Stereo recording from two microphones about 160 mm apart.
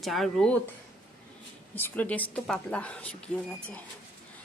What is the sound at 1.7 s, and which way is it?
Speech, 10° left (ahead or behind).